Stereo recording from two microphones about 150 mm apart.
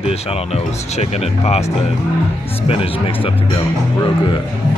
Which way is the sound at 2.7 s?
40° left (ahead or behind).